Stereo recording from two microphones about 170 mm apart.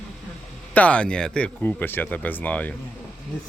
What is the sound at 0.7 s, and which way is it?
Speech, 5° left (ahead or behind).